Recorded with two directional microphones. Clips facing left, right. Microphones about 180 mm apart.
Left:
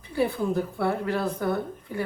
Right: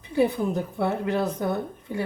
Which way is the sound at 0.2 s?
20° right (ahead or behind).